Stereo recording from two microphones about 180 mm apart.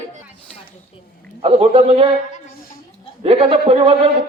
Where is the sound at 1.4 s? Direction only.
30° right (ahead or behind).